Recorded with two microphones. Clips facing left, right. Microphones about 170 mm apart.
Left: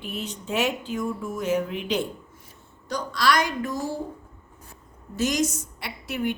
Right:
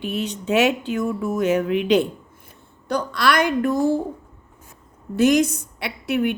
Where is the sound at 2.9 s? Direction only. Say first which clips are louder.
Right 3 dB; 60° right (ahead or behind).